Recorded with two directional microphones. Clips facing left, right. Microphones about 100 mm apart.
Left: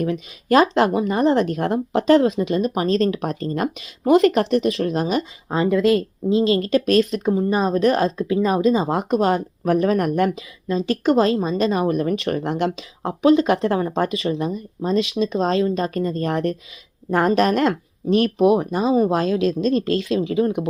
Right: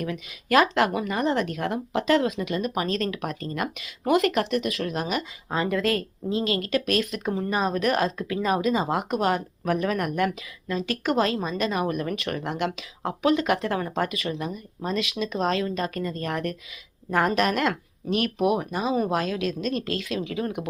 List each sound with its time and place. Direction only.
0.0 s speech: 30° left (ahead or behind)